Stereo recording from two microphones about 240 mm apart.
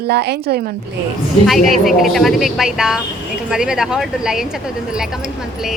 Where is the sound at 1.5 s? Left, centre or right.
Centre.